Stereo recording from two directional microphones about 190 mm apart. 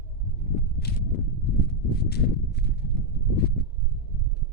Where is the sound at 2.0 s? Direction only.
60° left (ahead or behind).